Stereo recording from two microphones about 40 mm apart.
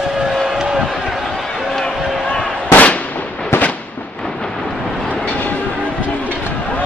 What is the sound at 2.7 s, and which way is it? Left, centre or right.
Fireworks, left.